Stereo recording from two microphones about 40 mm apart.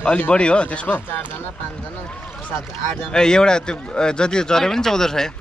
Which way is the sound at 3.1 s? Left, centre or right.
Centre.